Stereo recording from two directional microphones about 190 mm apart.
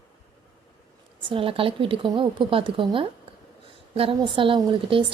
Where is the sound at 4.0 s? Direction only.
25° right (ahead or behind).